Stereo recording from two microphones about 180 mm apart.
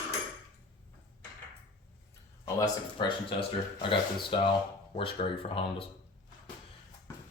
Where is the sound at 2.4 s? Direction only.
25° left (ahead or behind).